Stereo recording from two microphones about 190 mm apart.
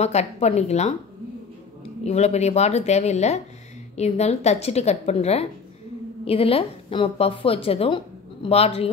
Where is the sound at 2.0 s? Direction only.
35° left (ahead or behind).